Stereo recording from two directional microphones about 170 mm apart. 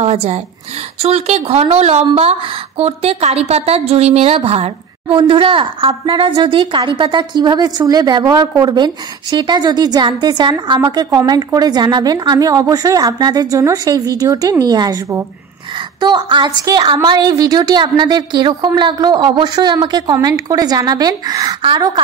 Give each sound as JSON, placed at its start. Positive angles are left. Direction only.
{"t": 0.0, "sound": "a woman's voice", "side_deg": -40}